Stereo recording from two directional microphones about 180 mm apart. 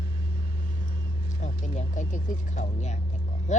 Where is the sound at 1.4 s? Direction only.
40° left (ahead or behind).